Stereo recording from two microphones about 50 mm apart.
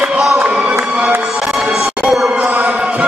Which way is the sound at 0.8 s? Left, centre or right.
Right.